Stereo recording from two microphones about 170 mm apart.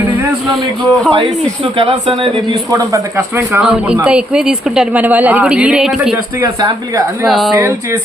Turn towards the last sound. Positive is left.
turn(degrees=-15)  # may be behind; listen again after turning